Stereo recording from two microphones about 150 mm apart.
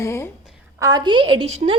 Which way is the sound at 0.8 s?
25° right (ahead or behind).